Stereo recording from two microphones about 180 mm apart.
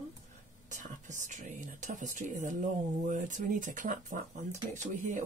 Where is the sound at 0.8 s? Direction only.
45° right (ahead or behind).